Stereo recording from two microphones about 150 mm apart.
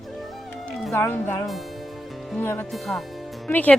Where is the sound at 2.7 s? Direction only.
Centre (ahead or behind).